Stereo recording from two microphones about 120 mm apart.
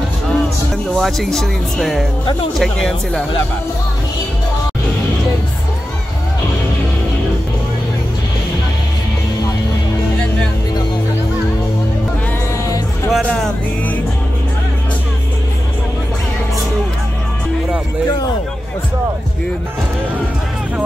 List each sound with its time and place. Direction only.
0.9 s speech: centre (ahead or behind)
12.6 s music: 30° left (ahead or behind)
13.3 s music: 5° left (ahead or behind)